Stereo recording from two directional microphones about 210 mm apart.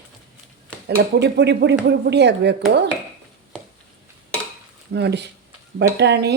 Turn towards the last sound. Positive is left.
turn(degrees=-55)  # may be behind; listen again after turning